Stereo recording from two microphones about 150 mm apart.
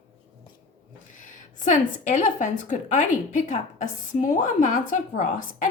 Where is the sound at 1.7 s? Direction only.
55° left (ahead or behind).